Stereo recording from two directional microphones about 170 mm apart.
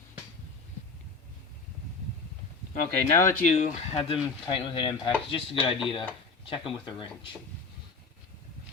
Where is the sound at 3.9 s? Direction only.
30° left (ahead or behind).